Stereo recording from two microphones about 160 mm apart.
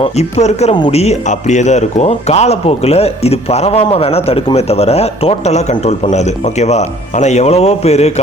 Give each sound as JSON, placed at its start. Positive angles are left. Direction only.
{"t": 0.0, "sound": "speech", "side_deg": 45}